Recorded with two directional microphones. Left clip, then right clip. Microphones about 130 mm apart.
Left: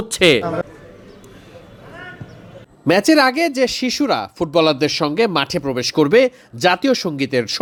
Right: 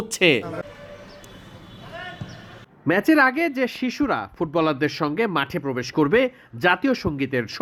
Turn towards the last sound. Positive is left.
turn(degrees=25)  # may be behind; listen again after turning